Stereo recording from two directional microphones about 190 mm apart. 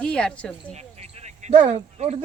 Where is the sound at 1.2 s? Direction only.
35° right (ahead or behind).